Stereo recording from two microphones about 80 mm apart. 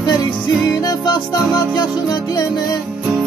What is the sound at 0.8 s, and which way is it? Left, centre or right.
Music, left.